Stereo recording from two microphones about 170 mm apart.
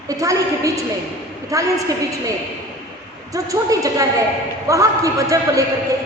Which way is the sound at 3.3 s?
20° right (ahead or behind).